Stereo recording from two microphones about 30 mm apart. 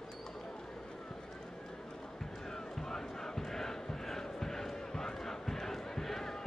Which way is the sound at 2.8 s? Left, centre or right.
Centre.